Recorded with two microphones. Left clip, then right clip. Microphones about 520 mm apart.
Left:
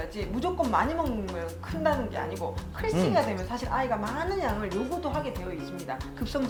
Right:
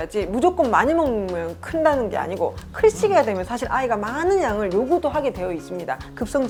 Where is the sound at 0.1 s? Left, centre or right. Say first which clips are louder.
Right 15 dB; right.